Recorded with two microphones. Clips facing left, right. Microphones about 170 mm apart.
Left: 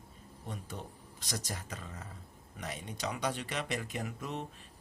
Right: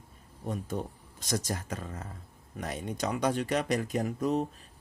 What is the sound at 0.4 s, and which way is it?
Speech, 45° right (ahead or behind).